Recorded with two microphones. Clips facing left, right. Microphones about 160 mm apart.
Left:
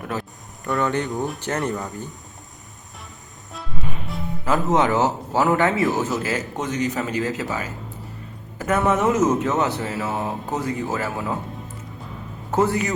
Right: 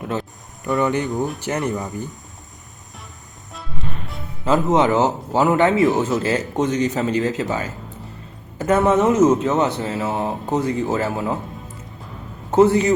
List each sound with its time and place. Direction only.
0.6 s speech: 10° right (ahead or behind)
3.5 s music: centre (ahead or behind)
4.4 s speech: 20° right (ahead or behind)
12.5 s a man's voice: 25° right (ahead or behind)